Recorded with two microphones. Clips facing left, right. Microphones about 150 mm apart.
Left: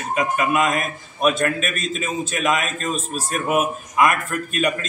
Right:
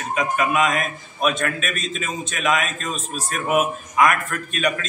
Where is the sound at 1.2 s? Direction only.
40° left (ahead or behind).